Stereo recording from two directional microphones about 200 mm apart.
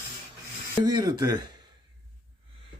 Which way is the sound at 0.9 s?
20° right (ahead or behind).